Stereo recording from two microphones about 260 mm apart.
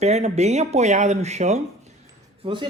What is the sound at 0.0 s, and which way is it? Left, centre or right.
Speech, right.